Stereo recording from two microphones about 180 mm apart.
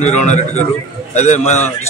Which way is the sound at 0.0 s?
40° left (ahead or behind).